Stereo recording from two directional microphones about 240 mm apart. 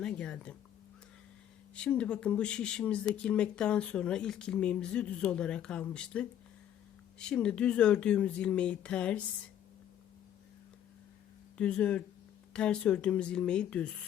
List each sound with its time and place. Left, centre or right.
0.0 s speech: centre
1.7 s speech: centre
11.5 s speech: centre